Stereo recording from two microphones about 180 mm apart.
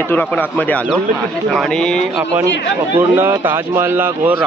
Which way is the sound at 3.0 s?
10° right (ahead or behind).